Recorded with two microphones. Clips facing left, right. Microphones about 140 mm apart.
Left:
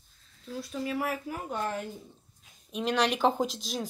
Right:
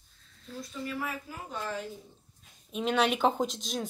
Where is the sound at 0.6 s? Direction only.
75° left (ahead or behind).